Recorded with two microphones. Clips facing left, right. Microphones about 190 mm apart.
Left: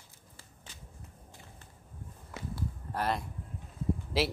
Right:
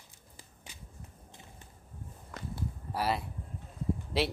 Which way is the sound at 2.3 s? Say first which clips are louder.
Left 1 dB; 10° left (ahead or behind).